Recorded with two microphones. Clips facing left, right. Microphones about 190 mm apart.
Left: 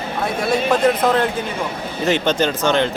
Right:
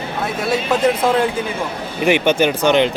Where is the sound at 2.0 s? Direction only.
15° right (ahead or behind).